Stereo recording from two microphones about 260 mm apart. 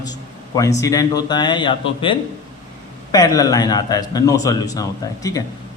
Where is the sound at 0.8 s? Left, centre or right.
Centre.